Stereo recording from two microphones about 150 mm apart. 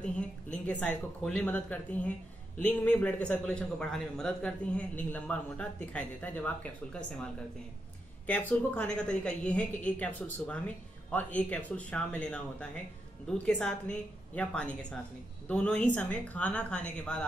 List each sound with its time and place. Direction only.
0.7 s a man's voice: 5° left (ahead or behind)
8.3 s a man's voice: 10° left (ahead or behind)